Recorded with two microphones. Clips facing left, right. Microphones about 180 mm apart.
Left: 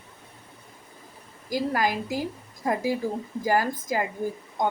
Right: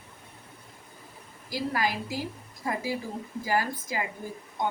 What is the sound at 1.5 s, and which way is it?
Speech, 45° left (ahead or behind).